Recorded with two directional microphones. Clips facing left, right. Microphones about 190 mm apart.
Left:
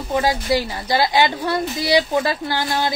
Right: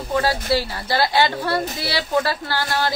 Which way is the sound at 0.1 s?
15° left (ahead or behind).